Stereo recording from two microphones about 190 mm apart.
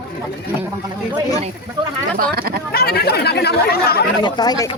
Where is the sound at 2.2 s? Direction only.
50° right (ahead or behind).